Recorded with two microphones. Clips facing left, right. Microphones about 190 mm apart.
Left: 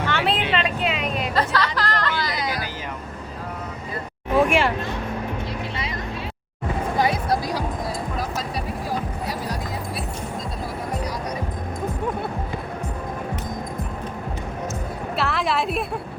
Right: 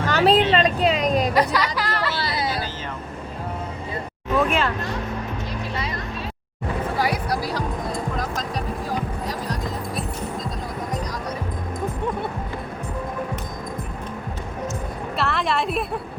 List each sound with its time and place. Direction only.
0.1 s a sound: 40° right (ahead or behind)
1.3 s music: 10° right (ahead or behind)
2.2 s vehicle: 30° right (ahead or behind)
4.4 s hubbub: 10° left (ahead or behind)
7.0 s music: 20° left (ahead or behind)
15.2 s a sound: centre (ahead or behind)